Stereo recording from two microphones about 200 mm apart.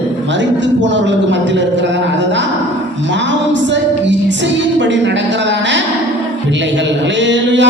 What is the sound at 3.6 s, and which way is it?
A woman's voice, 65° right (ahead or behind).